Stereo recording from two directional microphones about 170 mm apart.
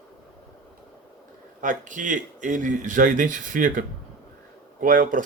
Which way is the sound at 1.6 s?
50° right (ahead or behind).